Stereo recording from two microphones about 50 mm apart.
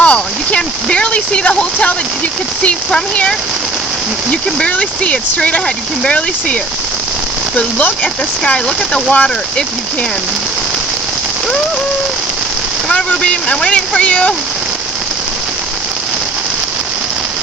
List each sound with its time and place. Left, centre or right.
0.0 s speech: left
12.9 s speech: left